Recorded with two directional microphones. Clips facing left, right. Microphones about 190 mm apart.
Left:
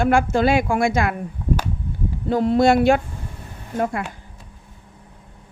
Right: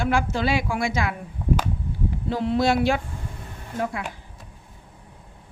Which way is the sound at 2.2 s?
45° left (ahead or behind).